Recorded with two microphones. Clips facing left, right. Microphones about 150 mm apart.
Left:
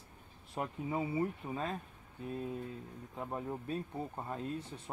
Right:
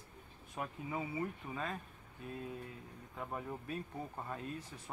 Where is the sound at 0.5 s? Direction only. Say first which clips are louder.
Left 4 dB; 35° left (ahead or behind).